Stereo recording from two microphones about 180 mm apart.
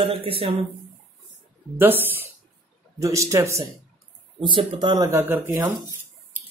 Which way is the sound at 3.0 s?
15° right (ahead or behind).